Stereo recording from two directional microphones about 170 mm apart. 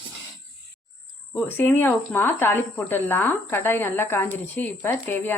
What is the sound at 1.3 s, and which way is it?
Speech, 10° left (ahead or behind).